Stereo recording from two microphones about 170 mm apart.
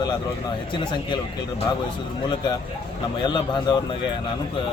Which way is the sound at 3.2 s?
25° left (ahead or behind).